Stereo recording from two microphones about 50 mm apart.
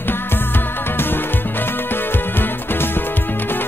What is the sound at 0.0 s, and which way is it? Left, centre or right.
Music, left.